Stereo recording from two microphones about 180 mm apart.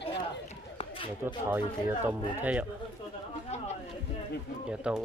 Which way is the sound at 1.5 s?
10° right (ahead or behind).